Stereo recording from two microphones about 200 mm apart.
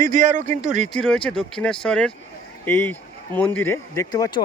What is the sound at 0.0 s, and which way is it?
Speech, 40° right (ahead or behind).